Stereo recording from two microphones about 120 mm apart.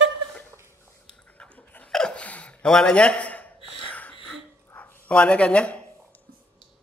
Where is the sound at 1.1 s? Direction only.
10° left (ahead or behind).